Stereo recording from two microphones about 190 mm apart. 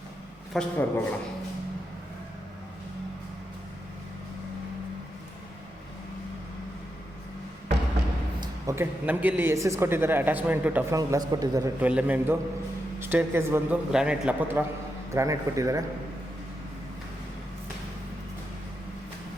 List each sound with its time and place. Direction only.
0.5 s a man's voice: 5° left (ahead or behind)
8.4 s speech: 15° right (ahead or behind)
11.8 s speech: 5° right (ahead or behind)